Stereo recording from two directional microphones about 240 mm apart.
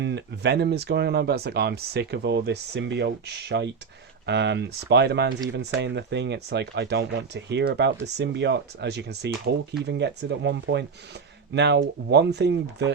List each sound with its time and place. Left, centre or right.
0.0 s speech: right